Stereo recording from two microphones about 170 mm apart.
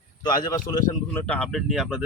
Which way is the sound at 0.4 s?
25° left (ahead or behind).